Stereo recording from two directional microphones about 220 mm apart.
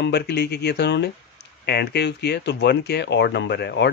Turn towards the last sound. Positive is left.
turn(degrees=50)  # may be behind; listen again after turning